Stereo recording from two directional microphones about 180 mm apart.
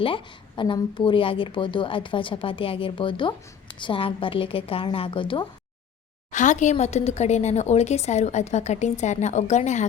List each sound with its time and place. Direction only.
0.0 s a woman's voice: 30° left (ahead or behind)
6.3 s speech: 45° left (ahead or behind)